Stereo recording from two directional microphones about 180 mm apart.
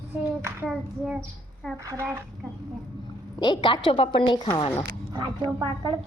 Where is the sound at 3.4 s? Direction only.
25° left (ahead or behind).